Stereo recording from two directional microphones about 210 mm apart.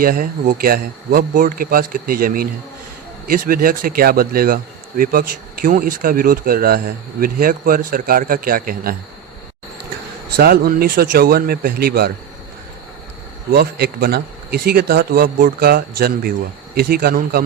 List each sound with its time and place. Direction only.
0.0 s speech: 45° right (ahead or behind)
10.3 s speech: 45° right (ahead or behind)
13.5 s speech: 45° right (ahead or behind)